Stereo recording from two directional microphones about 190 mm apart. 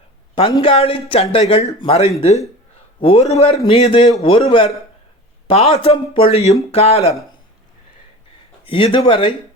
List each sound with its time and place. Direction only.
0.5 s a man's voice: 30° left (ahead or behind)
8.6 s speech: 25° left (ahead or behind)